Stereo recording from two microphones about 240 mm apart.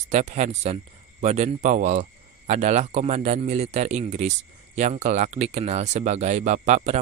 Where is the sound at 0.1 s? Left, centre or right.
Right.